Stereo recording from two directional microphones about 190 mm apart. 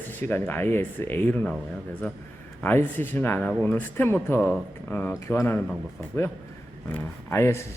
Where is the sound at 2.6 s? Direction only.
10° left (ahead or behind).